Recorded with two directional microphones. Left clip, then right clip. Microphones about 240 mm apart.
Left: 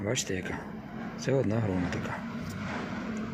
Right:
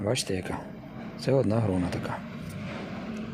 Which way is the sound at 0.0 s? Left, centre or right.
Centre.